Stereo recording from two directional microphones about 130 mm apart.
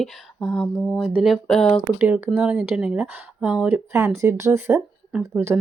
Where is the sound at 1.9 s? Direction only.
10° right (ahead or behind).